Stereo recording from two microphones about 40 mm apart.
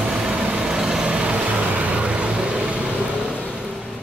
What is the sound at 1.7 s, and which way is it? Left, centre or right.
Vehicle, right.